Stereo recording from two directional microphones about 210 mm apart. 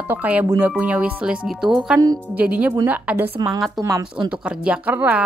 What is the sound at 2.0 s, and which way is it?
Speech, 20° right (ahead or behind).